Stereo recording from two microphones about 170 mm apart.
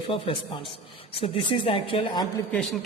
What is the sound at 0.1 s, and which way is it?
Speech, 30° left (ahead or behind).